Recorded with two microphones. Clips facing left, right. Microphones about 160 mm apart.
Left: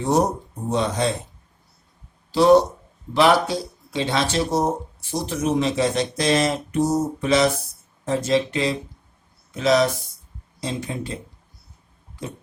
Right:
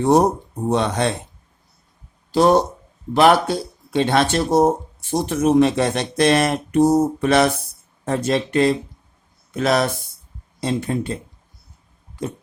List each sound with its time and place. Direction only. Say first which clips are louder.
0.0 s speech: right 5 dB; 60° right (ahead or behind)
2.3 s speech: left 1 dB; 50° right (ahead or behind)